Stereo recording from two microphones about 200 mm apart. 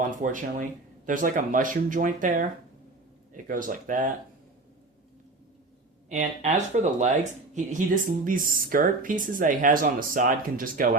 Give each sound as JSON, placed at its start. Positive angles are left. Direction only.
{"t": 0.0, "sound": "speech", "side_deg": -40}
{"t": 6.1, "sound": "speech", "side_deg": -40}